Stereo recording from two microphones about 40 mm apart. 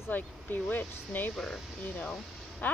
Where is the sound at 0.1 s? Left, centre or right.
Left.